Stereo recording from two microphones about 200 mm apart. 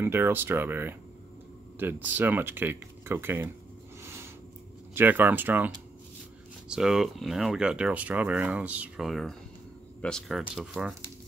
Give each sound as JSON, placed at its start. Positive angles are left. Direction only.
{"t": 0.0, "sound": "speech", "side_deg": -10}
{"t": 4.9, "sound": "speech", "side_deg": -10}
{"t": 6.7, "sound": "speech", "side_deg": 0}